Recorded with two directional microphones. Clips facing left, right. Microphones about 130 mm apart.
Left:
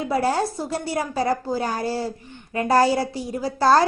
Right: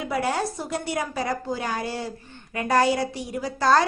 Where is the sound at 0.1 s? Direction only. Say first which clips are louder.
Left 4 dB; 35° left (ahead or behind).